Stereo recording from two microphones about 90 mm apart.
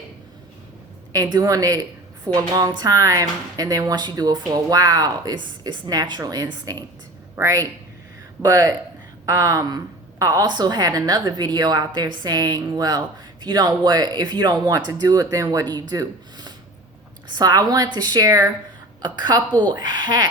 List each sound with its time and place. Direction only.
1.1 s a woman's voice: 45° right (ahead or behind)
19.0 s a woman's voice: 55° right (ahead or behind)